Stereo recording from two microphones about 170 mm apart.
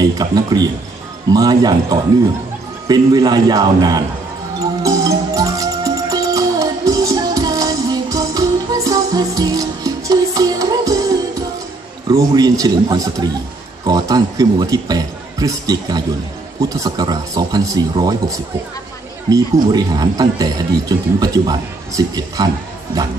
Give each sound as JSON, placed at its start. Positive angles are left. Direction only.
{"t": 0.0, "sound": "speech", "side_deg": -20}
{"t": 4.8, "sound": "music", "side_deg": -20}
{"t": 12.1, "sound": "a man's voice", "side_deg": -20}
{"t": 19.2, "sound": "speech", "side_deg": -20}